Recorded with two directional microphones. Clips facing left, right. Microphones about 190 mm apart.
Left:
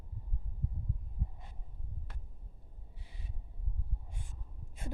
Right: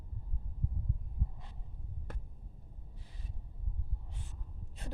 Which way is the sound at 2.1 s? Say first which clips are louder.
Right 7 dB; 50° right (ahead or behind).